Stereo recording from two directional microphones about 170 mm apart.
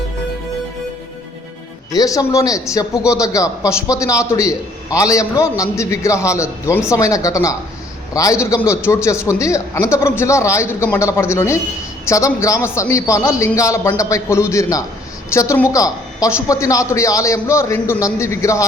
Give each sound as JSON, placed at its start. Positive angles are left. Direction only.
{"t": 1.9, "sound": "a man's voice", "side_deg": 20}